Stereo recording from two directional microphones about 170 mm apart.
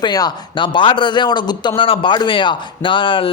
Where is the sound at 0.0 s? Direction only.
25° left (ahead or behind).